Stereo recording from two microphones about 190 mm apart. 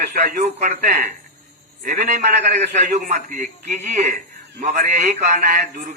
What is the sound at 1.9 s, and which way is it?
A man's voice, 40° right (ahead or behind).